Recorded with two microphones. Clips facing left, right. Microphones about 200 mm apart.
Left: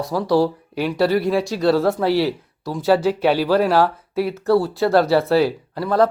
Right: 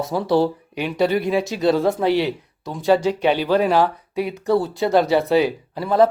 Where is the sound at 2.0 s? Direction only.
Centre (ahead or behind).